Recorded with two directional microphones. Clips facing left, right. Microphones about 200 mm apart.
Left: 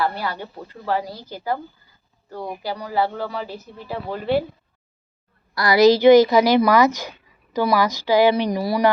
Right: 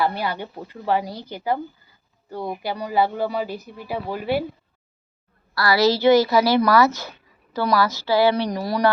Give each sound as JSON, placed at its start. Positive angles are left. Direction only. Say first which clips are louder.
{"t": 0.0, "sound": "speech", "louder": "right 1 dB", "side_deg": -15}
{"t": 5.5, "sound": "a woman's voice", "louder": "left 5 dB", "side_deg": 15}